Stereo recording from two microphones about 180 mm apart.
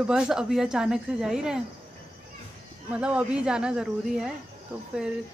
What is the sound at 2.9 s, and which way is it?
Speech, 5° right (ahead or behind).